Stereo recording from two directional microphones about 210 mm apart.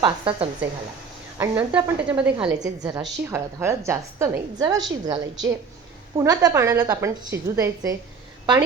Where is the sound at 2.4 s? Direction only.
20° right (ahead or behind).